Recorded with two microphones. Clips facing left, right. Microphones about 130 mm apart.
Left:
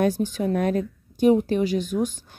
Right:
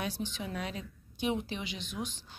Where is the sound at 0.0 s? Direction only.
45° left (ahead or behind).